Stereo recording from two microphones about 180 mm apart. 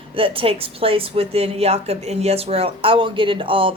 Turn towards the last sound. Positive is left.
turn(degrees=-30)  # may be behind; listen again after turning